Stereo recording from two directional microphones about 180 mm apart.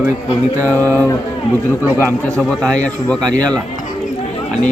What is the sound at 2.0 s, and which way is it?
A man's voice, 5° left (ahead or behind).